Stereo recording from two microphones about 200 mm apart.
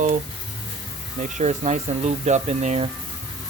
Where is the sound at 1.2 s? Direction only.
35° right (ahead or behind).